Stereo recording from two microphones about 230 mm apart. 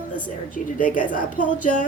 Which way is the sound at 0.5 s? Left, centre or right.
Left.